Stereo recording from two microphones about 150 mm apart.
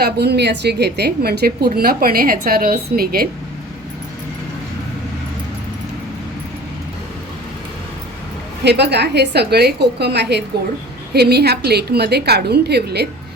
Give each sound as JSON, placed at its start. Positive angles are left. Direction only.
{"t": 0.0, "sound": "a woman's voice", "side_deg": -90}
{"t": 8.6, "sound": "a woman's voice", "side_deg": -90}